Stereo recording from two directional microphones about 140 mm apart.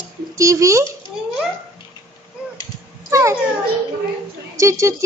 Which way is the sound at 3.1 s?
20° right (ahead or behind).